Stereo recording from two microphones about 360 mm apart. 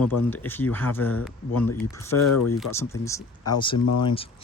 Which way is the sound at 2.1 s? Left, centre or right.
Left.